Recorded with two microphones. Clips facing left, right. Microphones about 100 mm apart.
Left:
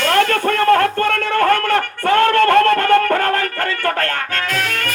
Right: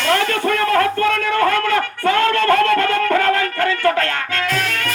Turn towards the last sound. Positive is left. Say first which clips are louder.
# even
turn(degrees=50)  # may be behind; listen again after turning